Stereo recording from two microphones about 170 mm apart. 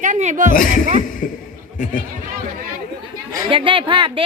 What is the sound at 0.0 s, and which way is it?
Speech, 45° right (ahead or behind).